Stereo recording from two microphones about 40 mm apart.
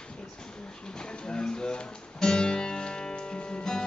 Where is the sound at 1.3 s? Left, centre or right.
Centre.